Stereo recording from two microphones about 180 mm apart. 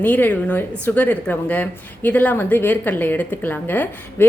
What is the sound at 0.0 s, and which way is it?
A woman's voice, 10° left (ahead or behind).